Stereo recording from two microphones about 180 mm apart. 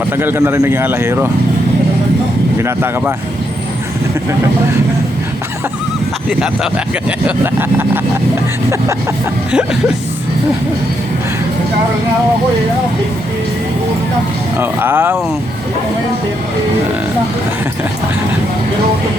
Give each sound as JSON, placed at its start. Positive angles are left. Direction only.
{"t": 0.2, "sound": "speech", "side_deg": -10}
{"t": 2.6, "sound": "speech", "side_deg": -15}
{"t": 7.3, "sound": "speech", "side_deg": -10}
{"t": 14.6, "sound": "speech", "side_deg": -10}